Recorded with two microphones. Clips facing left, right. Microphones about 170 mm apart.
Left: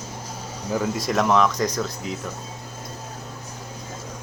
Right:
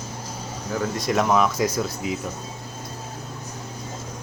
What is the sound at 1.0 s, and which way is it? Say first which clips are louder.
Speech: even; centre (ahead or behind).